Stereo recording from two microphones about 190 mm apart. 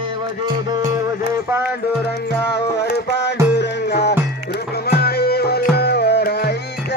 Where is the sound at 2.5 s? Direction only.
60° left (ahead or behind).